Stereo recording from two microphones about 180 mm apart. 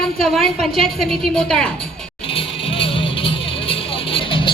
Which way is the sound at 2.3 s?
30° left (ahead or behind).